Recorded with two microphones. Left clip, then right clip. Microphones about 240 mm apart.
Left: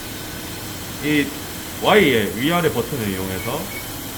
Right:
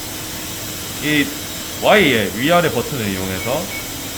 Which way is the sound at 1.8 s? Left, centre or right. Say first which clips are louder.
Right 2 dB; right.